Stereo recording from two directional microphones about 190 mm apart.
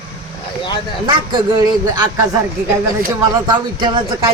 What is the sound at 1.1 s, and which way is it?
A man's voice, 25° right (ahead or behind).